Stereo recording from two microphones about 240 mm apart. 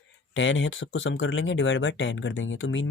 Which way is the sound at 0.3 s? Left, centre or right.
Left.